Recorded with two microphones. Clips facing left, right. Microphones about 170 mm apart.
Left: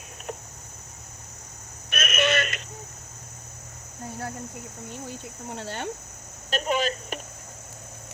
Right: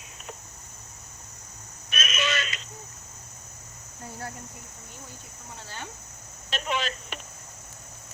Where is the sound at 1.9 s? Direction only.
60° left (ahead or behind).